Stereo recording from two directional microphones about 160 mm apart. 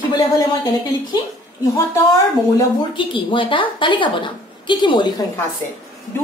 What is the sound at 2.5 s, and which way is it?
A woman's voice, 30° left (ahead or behind).